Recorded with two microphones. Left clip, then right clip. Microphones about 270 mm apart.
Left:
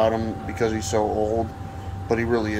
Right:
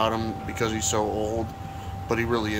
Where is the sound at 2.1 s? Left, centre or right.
Right.